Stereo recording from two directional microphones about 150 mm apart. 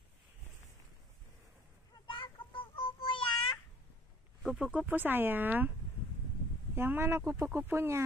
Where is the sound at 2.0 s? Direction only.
35° left (ahead or behind).